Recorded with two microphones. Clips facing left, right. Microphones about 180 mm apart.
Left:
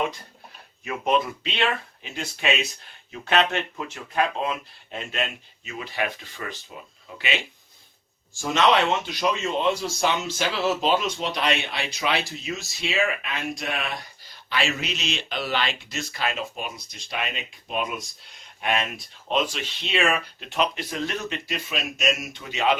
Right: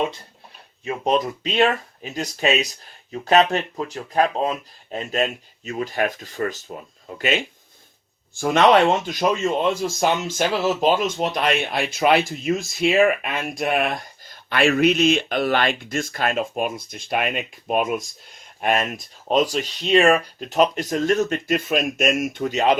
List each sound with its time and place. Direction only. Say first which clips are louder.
0.9 s speech: right 3 dB; 35° right (ahead or behind)
8.3 s speech: right 5 dB; 60° right (ahead or behind); by 22.8 s 40° right (ahead or behind)